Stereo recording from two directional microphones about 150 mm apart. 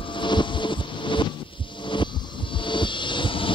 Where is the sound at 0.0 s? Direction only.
30° left (ahead or behind).